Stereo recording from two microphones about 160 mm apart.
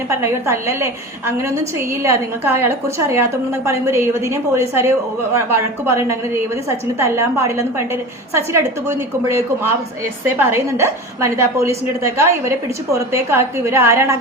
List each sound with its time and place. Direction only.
0.1 s a woman's voice: 15° right (ahead or behind)